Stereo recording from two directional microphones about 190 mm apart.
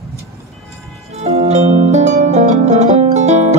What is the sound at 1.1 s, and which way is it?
Music, 35° right (ahead or behind).